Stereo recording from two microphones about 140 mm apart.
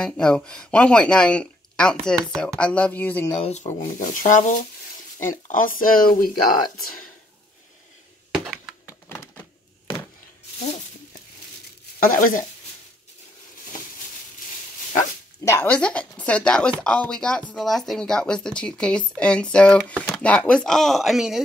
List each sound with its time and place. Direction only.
0.0 s speech: 5° left (ahead or behind)
3.3 s speech: 50° left (ahead or behind); by 6.3 s 90° left
8.8 s a sound: 20° left (ahead or behind)
12.0 s speech: 90° left
15.4 s speech: 15° left (ahead or behind); by 21.4 s centre (ahead or behind)